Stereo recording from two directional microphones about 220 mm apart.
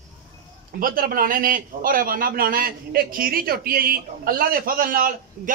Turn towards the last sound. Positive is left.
turn(degrees=-40)  # may be behind; listen again after turning